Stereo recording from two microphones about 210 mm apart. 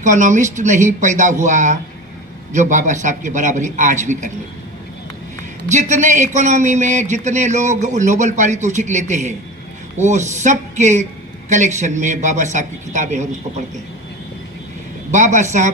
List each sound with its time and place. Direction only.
0.0 s a man's voice: 35° right (ahead or behind)
5.7 s a man's voice: 35° right (ahead or behind)
15.0 s a man's voice: 35° right (ahead or behind)